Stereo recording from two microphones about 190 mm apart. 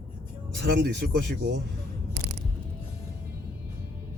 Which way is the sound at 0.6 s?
65° right (ahead or behind).